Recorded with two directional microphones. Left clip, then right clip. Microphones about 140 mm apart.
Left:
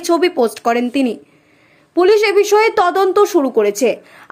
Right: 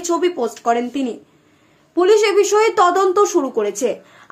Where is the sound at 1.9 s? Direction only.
30° left (ahead or behind).